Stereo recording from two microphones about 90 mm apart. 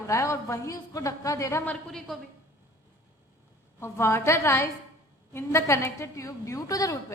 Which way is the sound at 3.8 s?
30° left (ahead or behind).